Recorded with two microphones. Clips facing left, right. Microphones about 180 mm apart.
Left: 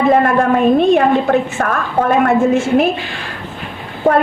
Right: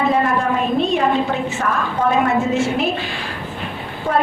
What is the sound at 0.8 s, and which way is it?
A woman's voice, 55° left (ahead or behind).